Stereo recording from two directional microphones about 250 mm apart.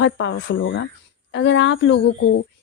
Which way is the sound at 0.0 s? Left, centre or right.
Left.